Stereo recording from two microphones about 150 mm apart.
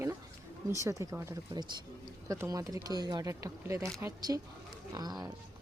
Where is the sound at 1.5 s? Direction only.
30° right (ahead or behind).